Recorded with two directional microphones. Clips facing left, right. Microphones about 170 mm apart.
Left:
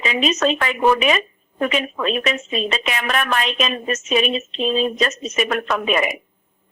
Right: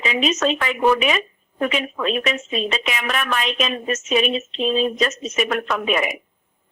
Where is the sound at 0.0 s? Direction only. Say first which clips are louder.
Left 1 dB; 40° left (ahead or behind).